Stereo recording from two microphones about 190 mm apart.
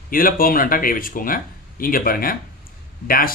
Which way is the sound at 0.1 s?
50° left (ahead or behind).